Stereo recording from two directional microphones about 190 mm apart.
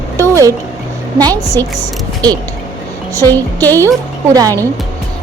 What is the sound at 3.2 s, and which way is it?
Speech, 10° left (ahead or behind).